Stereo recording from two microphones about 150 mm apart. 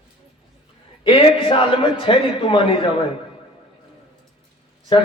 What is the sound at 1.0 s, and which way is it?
A man's voice, 35° left (ahead or behind).